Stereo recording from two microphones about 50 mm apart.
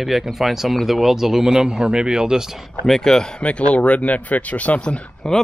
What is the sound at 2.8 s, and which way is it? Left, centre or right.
Speech, centre.